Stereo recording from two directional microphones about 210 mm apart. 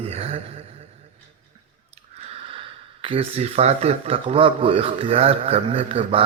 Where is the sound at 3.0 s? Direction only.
25° right (ahead or behind).